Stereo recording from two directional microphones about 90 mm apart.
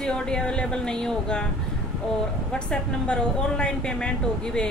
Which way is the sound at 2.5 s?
10° left (ahead or behind).